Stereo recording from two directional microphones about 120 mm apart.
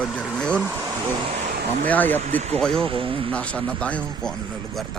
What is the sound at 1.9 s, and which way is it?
Speech, 15° left (ahead or behind).